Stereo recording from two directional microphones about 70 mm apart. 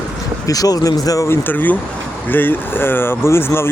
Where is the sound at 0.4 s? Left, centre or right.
Left.